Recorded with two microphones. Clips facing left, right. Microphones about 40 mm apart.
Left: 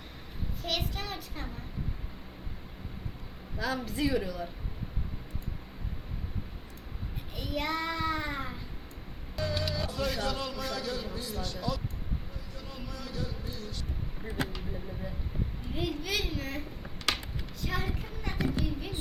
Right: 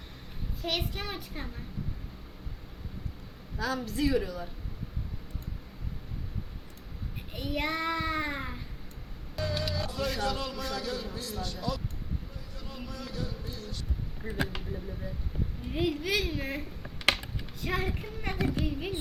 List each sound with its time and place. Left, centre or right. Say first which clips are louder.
0.6 s a child's voice: right 1 dB; centre
3.6 s a woman's voice: right 1 dB; centre
7.3 s child singing: right 1 dB; centre
9.3 s speech: even; centre
14.2 s speech: right 3 dB; left
15.9 s a woman's voice: right 3 dB; centre
17.6 s a woman's voice: right 3 dB; right